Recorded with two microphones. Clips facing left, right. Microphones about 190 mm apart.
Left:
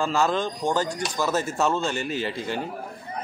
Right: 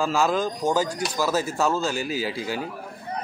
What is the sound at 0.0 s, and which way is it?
Speech, 5° right (ahead or behind).